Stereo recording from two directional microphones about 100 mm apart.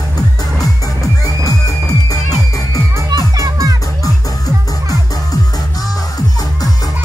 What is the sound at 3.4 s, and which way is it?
Music, 30° right (ahead or behind).